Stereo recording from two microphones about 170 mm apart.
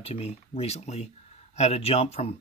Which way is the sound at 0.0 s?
35° left (ahead or behind).